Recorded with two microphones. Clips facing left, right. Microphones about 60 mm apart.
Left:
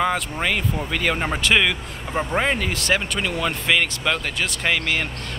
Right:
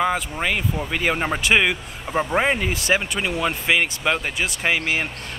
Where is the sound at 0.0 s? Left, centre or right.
Centre.